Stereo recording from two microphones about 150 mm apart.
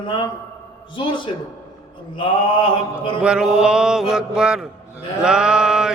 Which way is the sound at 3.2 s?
5° right (ahead or behind).